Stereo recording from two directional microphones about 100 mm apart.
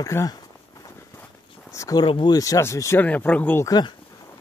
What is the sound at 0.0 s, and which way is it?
Speech, 35° left (ahead or behind).